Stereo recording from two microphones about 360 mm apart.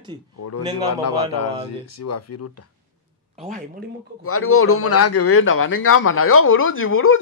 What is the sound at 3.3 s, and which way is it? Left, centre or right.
Speech, centre.